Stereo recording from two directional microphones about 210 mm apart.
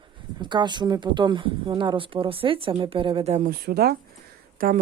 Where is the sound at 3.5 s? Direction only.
50° right (ahead or behind).